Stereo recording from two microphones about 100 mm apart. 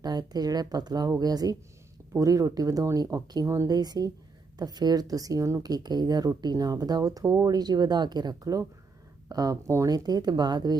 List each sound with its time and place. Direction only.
0.0 s speech: 40° right (ahead or behind)
3.8 s speech: 40° right (ahead or behind)
9.9 s speech: 40° right (ahead or behind)